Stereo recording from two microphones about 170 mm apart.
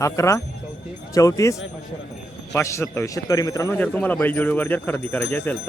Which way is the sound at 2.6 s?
15° left (ahead or behind).